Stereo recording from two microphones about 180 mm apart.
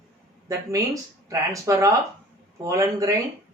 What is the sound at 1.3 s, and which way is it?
A woman's voice, 15° right (ahead or behind).